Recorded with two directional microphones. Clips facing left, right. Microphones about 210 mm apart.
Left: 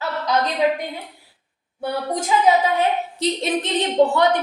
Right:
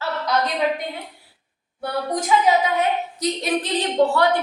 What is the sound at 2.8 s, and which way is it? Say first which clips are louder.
A woman's voice: left 1 dB; 25° left (ahead or behind).